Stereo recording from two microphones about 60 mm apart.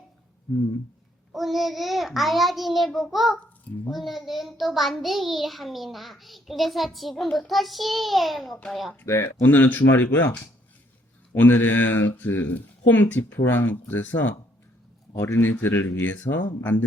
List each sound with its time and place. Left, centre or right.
1.3 s a child's voice: centre
9.0 s speech: left
9.5 s speech: left
11.3 s speech: left